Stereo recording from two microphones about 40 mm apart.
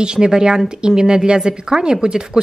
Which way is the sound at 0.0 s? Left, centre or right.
Centre.